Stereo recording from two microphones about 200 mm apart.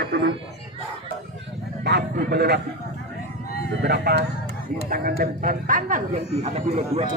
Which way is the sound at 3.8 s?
55° right (ahead or behind).